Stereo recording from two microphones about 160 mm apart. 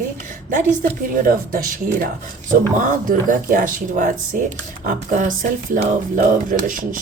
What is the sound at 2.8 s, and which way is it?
Speech, 55° right (ahead or behind).